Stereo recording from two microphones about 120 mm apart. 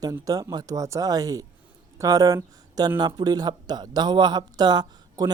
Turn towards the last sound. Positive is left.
turn(degrees=-35)  # may be behind; listen again after turning